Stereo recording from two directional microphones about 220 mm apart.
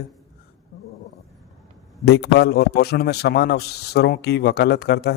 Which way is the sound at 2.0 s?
50° left (ahead or behind).